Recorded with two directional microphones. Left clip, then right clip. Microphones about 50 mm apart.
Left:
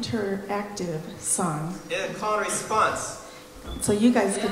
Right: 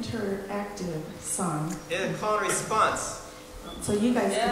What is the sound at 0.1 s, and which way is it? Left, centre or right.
Speech, left.